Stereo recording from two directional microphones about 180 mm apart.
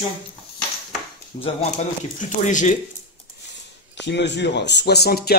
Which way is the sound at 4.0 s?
75° left (ahead or behind).